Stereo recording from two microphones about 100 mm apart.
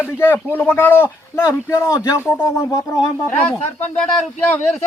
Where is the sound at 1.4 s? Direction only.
30° left (ahead or behind).